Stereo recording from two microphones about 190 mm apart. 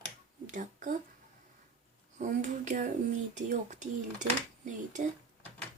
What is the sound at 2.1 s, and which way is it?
Speech, 40° right (ahead or behind).